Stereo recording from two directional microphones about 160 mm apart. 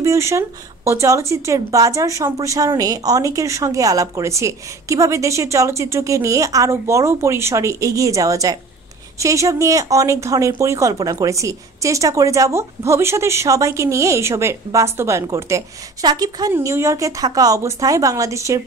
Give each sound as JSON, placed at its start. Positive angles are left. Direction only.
{"t": 0.0, "sound": "a woman's voice", "side_deg": -20}